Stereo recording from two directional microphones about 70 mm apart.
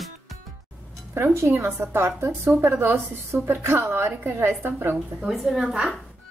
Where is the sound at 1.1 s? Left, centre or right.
Right.